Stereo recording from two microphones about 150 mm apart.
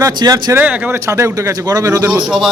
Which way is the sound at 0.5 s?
10° right (ahead or behind).